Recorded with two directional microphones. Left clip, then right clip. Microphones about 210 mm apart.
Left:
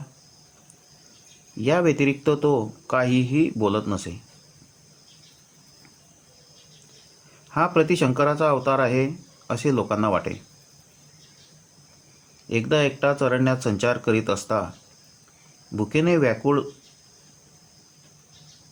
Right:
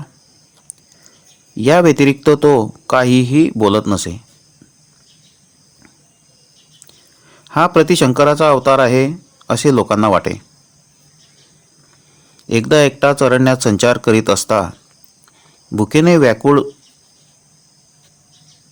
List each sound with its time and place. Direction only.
1.5 s speech: 40° right (ahead or behind)
7.4 s speech: 40° right (ahead or behind)
12.5 s speech: 45° right (ahead or behind)
15.7 s speech: 45° right (ahead or behind)